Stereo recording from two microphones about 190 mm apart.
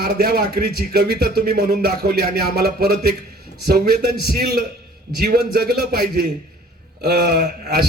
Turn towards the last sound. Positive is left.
turn(degrees=-55)  # may be behind; listen again after turning